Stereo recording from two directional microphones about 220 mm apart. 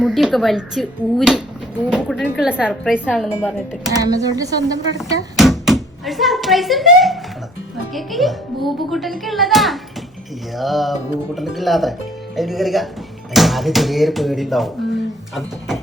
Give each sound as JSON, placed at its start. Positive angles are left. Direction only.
{"t": 0.0, "sound": "a child's voice", "side_deg": 0}
{"t": 3.9, "sound": "speech", "side_deg": -15}
{"t": 4.9, "sound": "a child's voice", "side_deg": 0}